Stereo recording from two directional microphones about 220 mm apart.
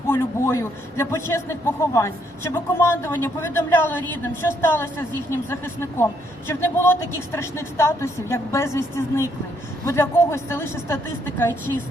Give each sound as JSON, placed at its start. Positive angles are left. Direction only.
{"t": 0.1, "sound": "a man's voice", "side_deg": 10}